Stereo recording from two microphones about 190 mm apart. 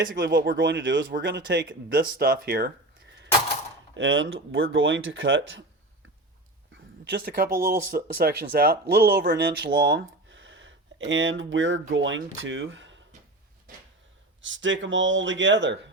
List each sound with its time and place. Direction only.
0.2 s speech: 60° right (ahead or behind)
3.9 s speech: 85° right
7.0 s speech: 60° right (ahead or behind); by 13.0 s 75° right (ahead or behind)
14.4 s speech: 80° right